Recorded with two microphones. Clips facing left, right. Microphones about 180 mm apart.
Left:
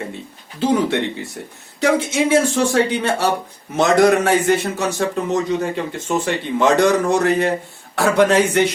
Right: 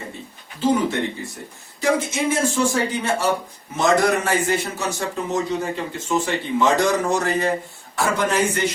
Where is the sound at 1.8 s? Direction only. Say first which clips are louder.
Left 4 dB; 70° left (ahead or behind).